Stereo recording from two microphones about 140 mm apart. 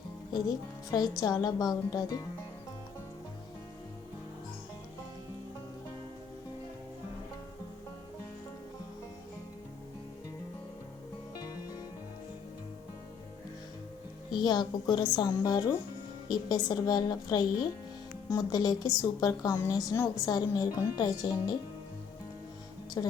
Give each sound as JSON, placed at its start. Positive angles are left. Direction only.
{"t": 0.3, "sound": "a woman's voice", "side_deg": 25}
{"t": 14.3, "sound": "a woman's voice", "side_deg": 30}
{"t": 23.0, "sound": "a woman's voice", "side_deg": 20}